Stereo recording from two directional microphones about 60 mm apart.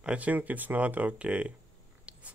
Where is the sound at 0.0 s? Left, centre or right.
Right.